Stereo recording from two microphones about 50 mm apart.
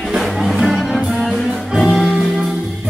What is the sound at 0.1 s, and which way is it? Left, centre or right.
Music, centre.